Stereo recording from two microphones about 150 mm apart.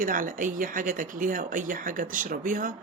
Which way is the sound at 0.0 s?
65° right (ahead or behind).